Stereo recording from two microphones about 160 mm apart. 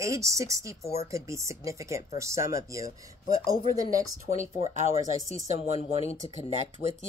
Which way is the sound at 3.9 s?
50° right (ahead or behind).